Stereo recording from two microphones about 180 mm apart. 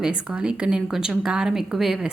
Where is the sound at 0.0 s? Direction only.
5° right (ahead or behind).